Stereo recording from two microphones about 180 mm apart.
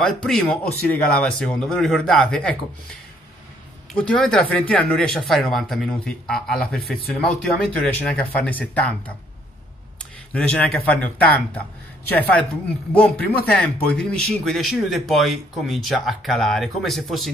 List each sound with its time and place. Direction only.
0.0 s speech: 5° left (ahead or behind)
3.9 s speech: 5° left (ahead or behind)
10.3 s speech: 10° left (ahead or behind)
13.5 s speech: 5° left (ahead or behind)